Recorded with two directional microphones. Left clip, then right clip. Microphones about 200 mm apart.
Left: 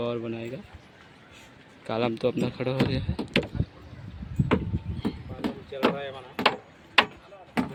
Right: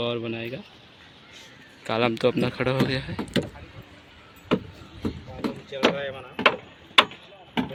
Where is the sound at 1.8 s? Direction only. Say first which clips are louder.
Right 4 dB; centre (ahead or behind).